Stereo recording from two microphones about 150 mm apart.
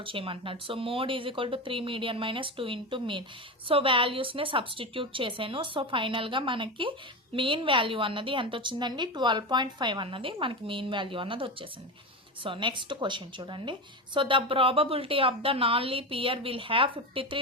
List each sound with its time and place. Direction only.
0.0 s a woman's voice: 35° right (ahead or behind)